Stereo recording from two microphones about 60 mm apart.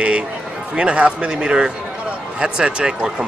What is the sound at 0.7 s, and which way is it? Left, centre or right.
A man's voice, centre.